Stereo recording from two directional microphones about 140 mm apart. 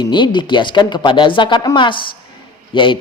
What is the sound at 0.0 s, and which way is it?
A woman's voice, 35° left (ahead or behind).